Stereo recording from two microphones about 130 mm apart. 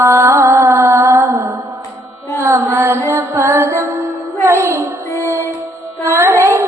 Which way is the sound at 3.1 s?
20° right (ahead or behind).